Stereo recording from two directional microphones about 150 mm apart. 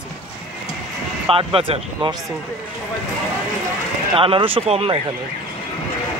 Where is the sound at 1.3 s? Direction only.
40° right (ahead or behind).